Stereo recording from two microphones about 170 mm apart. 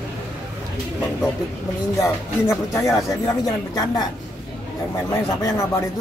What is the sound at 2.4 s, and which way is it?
A man's voice, 15° left (ahead or behind).